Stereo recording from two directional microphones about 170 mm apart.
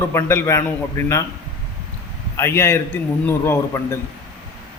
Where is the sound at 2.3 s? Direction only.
15° left (ahead or behind).